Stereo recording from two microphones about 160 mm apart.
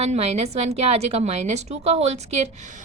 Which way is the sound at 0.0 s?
40° right (ahead or behind).